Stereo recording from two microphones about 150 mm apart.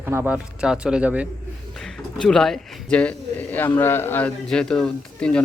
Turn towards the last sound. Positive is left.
turn(degrees=5)  # may be behind; listen again after turning